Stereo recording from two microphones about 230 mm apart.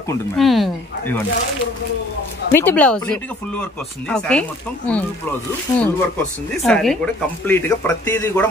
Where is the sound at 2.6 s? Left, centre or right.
Centre.